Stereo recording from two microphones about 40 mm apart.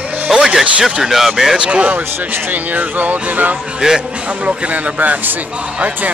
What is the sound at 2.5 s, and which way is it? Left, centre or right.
Speech, right.